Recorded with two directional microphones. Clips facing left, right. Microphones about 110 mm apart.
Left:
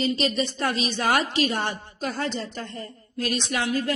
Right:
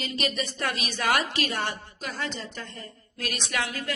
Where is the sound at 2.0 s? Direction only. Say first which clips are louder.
Left 8 dB; 40° left (ahead or behind).